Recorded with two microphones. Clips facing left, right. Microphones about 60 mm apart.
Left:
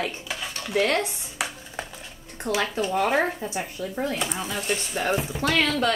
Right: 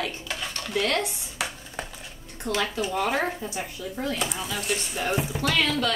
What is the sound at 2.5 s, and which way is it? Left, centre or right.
Speech, left.